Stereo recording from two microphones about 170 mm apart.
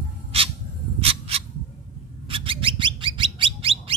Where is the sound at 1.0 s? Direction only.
35° right (ahead or behind).